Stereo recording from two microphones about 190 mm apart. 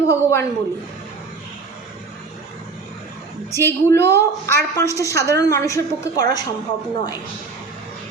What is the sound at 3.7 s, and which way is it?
A woman's voice, 15° left (ahead or behind).